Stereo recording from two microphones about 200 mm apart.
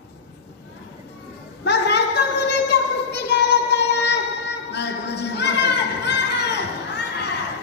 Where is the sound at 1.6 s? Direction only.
60° left (ahead or behind).